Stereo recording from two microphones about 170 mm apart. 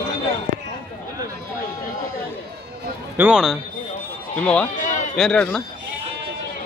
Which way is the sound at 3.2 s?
5° right (ahead or behind).